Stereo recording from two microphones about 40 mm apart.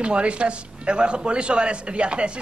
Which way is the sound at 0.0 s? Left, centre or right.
Right.